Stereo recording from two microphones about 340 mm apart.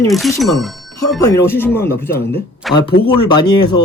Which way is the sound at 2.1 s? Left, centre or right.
Left.